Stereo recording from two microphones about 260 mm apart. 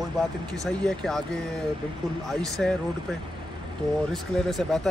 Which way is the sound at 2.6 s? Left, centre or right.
Centre.